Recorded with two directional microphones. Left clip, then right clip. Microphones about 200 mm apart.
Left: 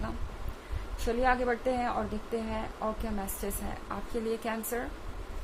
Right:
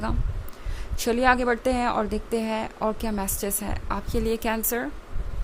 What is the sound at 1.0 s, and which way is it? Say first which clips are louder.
A woman's voice: right 7 dB; 50° right (ahead or behind).